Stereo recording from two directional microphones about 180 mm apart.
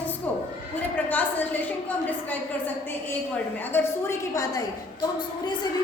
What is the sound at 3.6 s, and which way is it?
A woman's voice, 15° left (ahead or behind).